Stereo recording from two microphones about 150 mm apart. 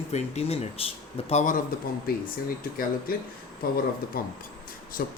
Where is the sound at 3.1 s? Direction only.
75° left (ahead or behind).